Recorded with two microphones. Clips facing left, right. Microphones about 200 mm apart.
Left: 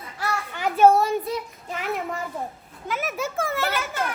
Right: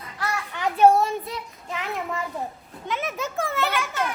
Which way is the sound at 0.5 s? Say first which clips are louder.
Even; centre (ahead or behind).